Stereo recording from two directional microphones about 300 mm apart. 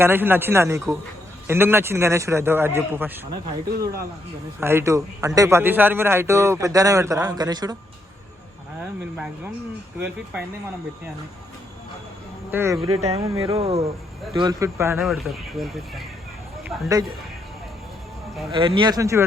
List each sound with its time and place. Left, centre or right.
0.0 s a man's voice: centre
4.6 s a man's voice: centre
9.1 s speech: centre
12.5 s a man's voice: centre
12.9 s speech: right; by 16.0 s centre
16.6 s a man's voice: centre
18.5 s a man's voice: centre